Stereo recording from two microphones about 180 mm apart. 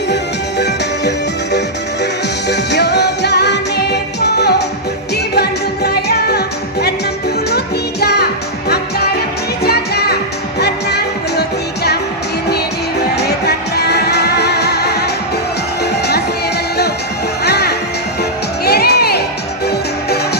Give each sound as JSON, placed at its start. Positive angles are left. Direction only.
{"t": 2.5, "sound": "music", "side_deg": 70}
{"t": 8.0, "sound": "music", "side_deg": 65}
{"t": 9.6, "sound": "music", "side_deg": 65}
{"t": 13.1, "sound": "music", "side_deg": 65}
{"t": 17.4, "sound": "music", "side_deg": 65}